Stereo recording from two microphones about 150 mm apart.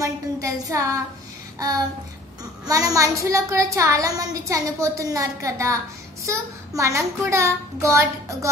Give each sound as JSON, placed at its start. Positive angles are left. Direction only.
{"t": 0.0, "sound": "a woman's voice", "side_deg": -20}
{"t": 2.6, "sound": "a woman's voice", "side_deg": -25}